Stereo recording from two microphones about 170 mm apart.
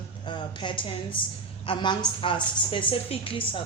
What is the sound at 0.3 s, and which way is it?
Speech, 25° left (ahead or behind).